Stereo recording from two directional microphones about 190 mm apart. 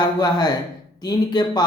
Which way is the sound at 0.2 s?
20° left (ahead or behind).